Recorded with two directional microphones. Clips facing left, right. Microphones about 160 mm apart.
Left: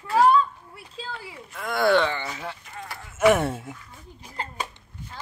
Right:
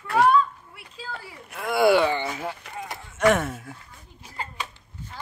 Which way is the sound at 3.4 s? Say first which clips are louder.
Left 3 dB; 25° left (ahead or behind).